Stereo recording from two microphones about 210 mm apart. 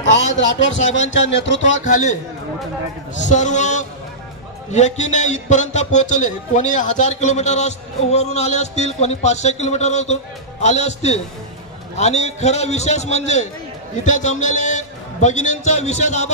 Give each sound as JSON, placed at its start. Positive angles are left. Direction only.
{"t": 0.0, "sound": "speech", "side_deg": 60}
{"t": 1.6, "sound": "a man's voice", "side_deg": 35}
{"t": 3.2, "sound": "a man's voice", "side_deg": 35}